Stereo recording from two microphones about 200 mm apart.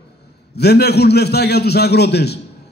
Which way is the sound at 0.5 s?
55° left (ahead or behind).